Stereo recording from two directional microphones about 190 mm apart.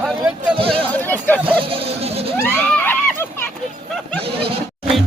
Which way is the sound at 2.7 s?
10° left (ahead or behind).